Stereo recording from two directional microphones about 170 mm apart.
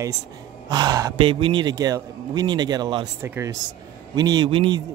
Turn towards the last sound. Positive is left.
turn(degrees=-30)  # may be behind; listen again after turning